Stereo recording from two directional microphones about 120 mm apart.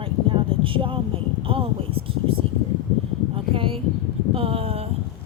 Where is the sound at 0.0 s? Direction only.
45° right (ahead or behind).